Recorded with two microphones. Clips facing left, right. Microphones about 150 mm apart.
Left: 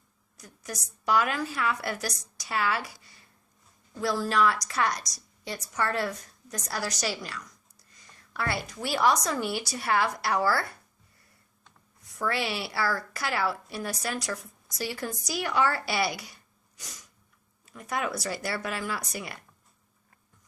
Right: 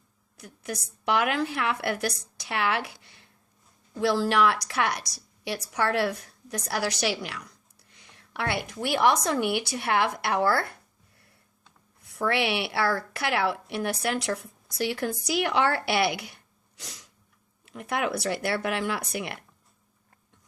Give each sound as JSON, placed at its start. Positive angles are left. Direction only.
{"t": 0.3, "sound": "a woman's voice", "side_deg": -60}
{"t": 12.0, "sound": "a woman's voice", "side_deg": -65}